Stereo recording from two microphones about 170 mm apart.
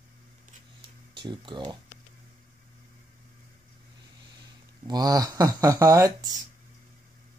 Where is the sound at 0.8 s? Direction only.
30° right (ahead or behind).